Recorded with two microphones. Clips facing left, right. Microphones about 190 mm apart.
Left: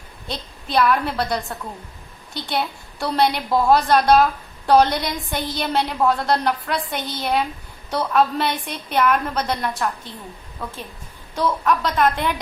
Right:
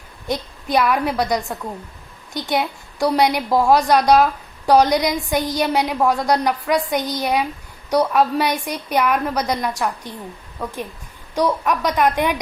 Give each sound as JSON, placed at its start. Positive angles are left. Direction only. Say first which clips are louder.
{"t": 0.3, "sound": "a woman's voice", "louder": "right 7 dB", "side_deg": -15}
{"t": 3.0, "sound": "a woman's voice", "louder": "right 3 dB", "side_deg": -15}